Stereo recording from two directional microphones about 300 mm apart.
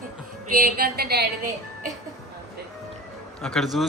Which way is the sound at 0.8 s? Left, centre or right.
Right.